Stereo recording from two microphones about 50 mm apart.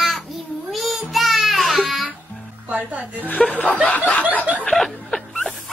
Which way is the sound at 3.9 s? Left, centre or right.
Left.